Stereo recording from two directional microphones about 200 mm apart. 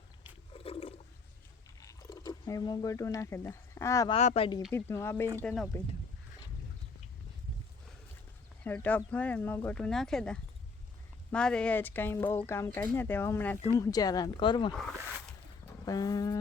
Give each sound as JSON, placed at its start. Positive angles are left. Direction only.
{"t": 0.5, "sound": "a sound", "side_deg": 30}
{"t": 1.8, "sound": "speech", "side_deg": 15}
{"t": 4.1, "sound": "speech", "side_deg": 30}
{"t": 4.7, "sound": "speech", "side_deg": 10}
{"t": 8.6, "sound": "speech", "side_deg": 10}
{"t": 15.9, "sound": "speech", "side_deg": 20}